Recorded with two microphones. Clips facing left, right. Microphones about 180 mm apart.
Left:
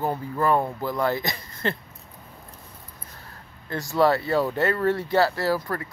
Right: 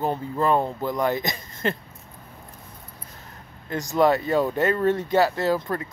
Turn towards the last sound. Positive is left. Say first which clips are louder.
# right 2 dB
turn(degrees=-20)  # may be behind; listen again after turning